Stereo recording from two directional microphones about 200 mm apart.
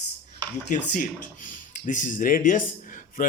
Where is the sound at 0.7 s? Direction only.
40° left (ahead or behind).